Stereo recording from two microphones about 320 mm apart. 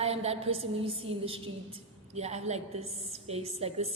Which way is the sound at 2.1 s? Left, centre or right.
Centre.